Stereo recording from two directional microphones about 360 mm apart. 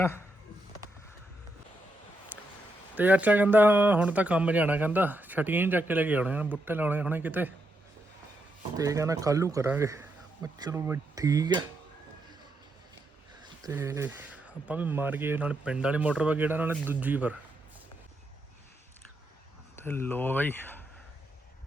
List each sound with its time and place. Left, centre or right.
2.9 s speech: centre
8.8 s speech: centre
13.7 s speech: centre
19.7 s speech: centre